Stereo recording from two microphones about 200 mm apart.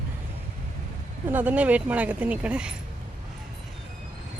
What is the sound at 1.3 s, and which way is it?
Speech, 10° right (ahead or behind).